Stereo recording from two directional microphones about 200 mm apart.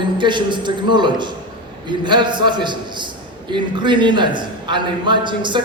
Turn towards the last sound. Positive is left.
turn(degrees=-25)  # may be behind; listen again after turning